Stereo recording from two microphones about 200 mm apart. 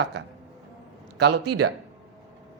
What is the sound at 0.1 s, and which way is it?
Speech, 55° right (ahead or behind).